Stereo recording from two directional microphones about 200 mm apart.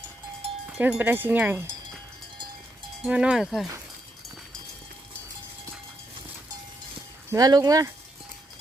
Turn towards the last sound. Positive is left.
turn(degrees=-20)  # may be behind; listen again after turning